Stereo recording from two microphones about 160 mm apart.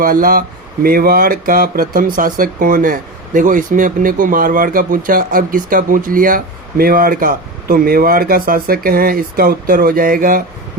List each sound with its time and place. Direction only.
0.0 s speech: 60° right (ahead or behind)